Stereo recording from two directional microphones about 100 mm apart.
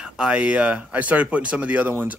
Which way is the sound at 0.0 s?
10° right (ahead or behind).